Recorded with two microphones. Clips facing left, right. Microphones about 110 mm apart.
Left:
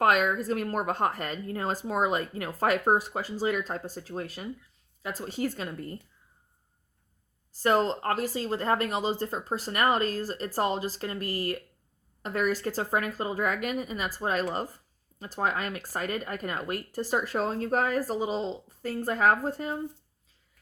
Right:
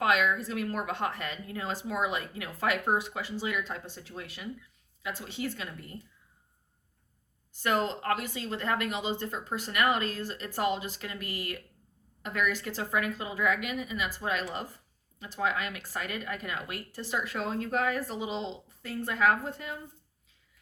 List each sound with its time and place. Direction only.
0.0 s speech: 45° left (ahead or behind)
7.5 s speech: 35° left (ahead or behind)